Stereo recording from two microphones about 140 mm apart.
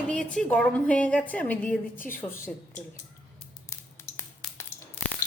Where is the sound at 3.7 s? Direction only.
20° left (ahead or behind).